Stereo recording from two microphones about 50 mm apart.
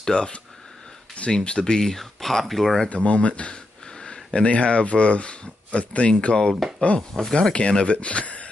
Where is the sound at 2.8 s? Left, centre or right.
Left.